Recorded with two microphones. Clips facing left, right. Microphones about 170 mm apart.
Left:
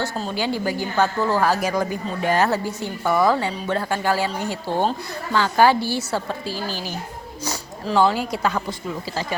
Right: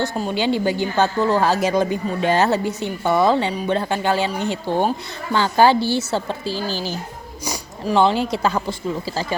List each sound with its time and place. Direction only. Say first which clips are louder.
0.0 s a woman's voice: right 4 dB; 15° right (ahead or behind)
7.4 s a woman's voice: right 3 dB; 15° right (ahead or behind)